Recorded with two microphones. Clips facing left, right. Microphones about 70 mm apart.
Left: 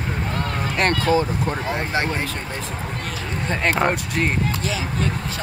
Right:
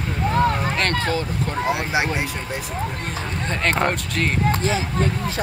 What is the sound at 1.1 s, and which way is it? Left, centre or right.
Speech, left.